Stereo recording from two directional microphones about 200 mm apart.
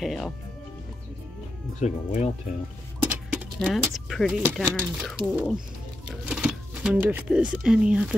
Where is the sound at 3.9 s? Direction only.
Centre (ahead or behind).